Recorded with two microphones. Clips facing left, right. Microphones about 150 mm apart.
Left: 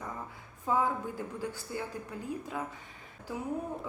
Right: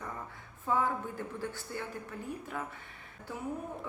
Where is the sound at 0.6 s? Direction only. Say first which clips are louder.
Left 1 dB; 15° left (ahead or behind).